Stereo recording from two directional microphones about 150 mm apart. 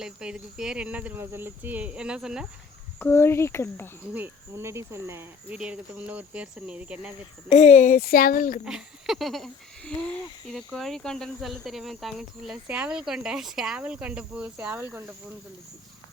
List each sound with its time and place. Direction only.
0.0 s speech: 5° right (ahead or behind)
3.0 s speech: 15° left (ahead or behind)
4.0 s speech: 10° right (ahead or behind)
7.5 s speech: 50° left (ahead or behind)
8.6 s speech: 5° right (ahead or behind)